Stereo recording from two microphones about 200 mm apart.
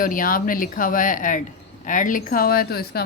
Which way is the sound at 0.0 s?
45° left (ahead or behind).